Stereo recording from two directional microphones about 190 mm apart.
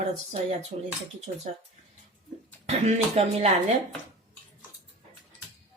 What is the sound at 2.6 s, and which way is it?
Speech, 35° right (ahead or behind).